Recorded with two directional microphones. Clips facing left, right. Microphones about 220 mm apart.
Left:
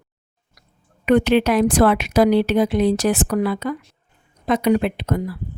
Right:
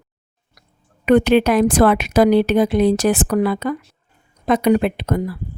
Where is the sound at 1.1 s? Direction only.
50° right (ahead or behind).